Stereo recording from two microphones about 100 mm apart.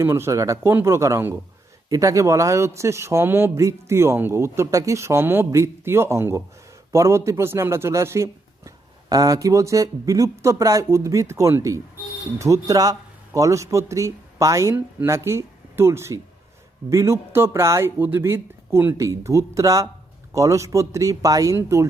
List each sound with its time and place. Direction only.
0.0 s speech: 25° right (ahead or behind)